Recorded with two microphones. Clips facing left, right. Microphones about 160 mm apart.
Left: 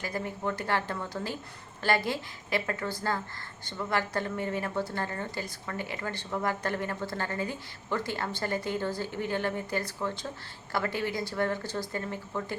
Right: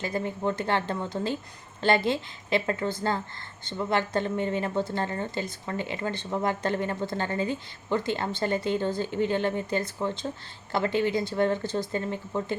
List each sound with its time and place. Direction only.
0.0 s a woman's voice: 25° right (ahead or behind)